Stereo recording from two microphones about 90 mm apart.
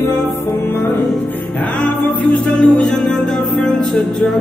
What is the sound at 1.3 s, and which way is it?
Music, 15° left (ahead or behind).